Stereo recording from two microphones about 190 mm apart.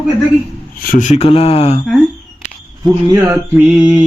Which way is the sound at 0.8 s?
45° left (ahead or behind).